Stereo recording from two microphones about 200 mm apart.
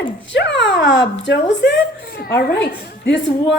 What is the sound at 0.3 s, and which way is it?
A woman's voice, 60° left (ahead or behind).